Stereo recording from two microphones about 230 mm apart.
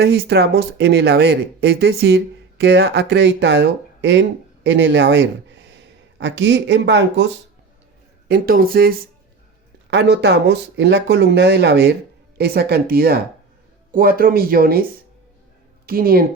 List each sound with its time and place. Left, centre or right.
0.0 s speech: right
8.3 s speech: right
15.9 s speech: right